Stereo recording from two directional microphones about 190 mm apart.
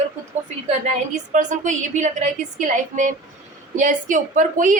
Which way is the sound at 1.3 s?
40° right (ahead or behind).